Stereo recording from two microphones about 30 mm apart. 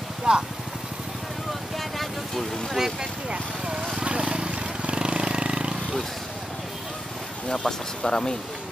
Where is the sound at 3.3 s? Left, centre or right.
Right.